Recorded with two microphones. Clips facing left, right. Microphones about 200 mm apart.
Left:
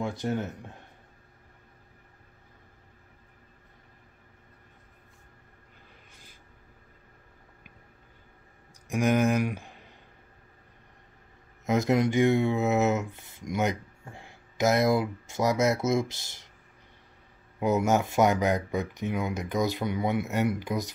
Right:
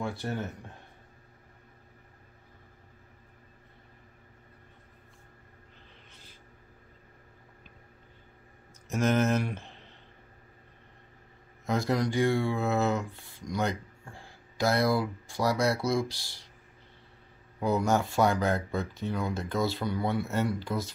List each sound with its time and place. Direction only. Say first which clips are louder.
0.0 s speech: left 3 dB; 15° left (ahead or behind)
8.8 s speech: left 2 dB; 10° left (ahead or behind)
11.6 s speech: left 4 dB; 20° left (ahead or behind)
17.6 s speech: left 2 dB; 20° left (ahead or behind)